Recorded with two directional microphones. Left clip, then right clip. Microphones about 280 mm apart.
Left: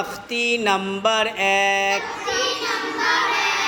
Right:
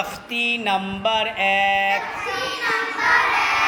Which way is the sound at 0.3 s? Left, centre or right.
Centre.